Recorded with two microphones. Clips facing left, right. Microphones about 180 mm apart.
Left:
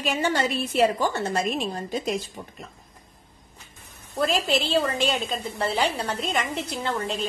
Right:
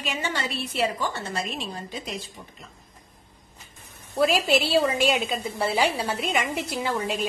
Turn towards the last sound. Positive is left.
turn(degrees=-5)  # may be behind; listen again after turning